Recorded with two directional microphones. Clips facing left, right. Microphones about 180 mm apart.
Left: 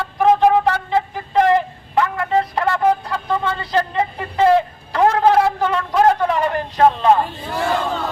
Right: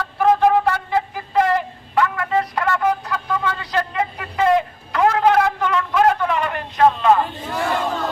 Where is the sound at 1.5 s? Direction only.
25° left (ahead or behind).